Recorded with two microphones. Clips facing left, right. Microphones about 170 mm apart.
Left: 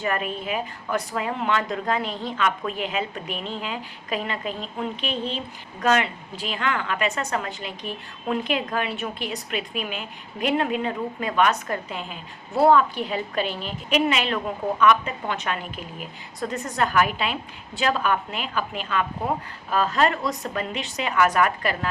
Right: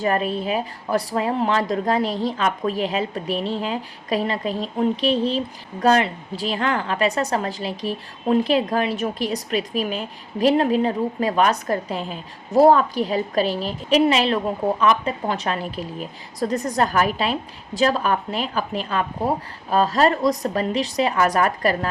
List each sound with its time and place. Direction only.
0.0 s a woman's voice: 35° right (ahead or behind)